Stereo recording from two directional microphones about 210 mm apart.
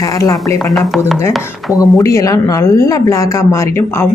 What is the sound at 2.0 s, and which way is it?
A woman's voice, 15° left (ahead or behind).